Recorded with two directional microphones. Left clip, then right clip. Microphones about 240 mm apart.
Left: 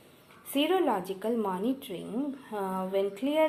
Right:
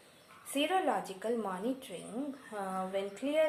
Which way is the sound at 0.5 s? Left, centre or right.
Left.